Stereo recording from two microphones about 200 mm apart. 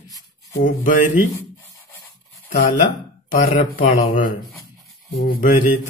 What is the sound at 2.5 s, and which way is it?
Speech, 40° left (ahead or behind).